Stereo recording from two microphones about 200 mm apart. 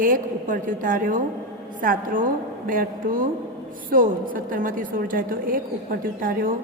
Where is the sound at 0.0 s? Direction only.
45° right (ahead or behind).